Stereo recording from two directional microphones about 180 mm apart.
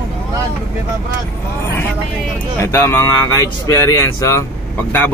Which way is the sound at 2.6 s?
15° left (ahead or behind).